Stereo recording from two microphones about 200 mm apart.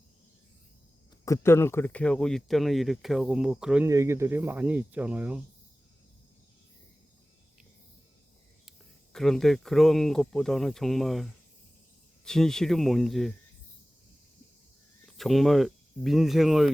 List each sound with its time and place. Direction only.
1.2 s speech: 15° left (ahead or behind); by 3.8 s 5° right (ahead or behind)
3.8 s speech: 15° right (ahead or behind)
9.1 s speech: centre (ahead or behind)
15.0 s speech: centre (ahead or behind)